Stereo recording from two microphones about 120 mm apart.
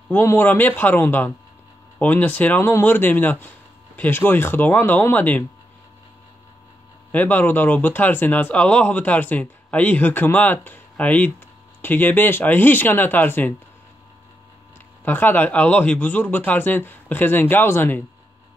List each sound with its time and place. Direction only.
0.1 s speech: 20° left (ahead or behind)
7.1 s speech: 15° left (ahead or behind)
15.0 s speech: 15° left (ahead or behind)